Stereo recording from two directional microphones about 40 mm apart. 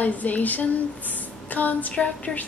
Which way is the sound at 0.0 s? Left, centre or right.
Left.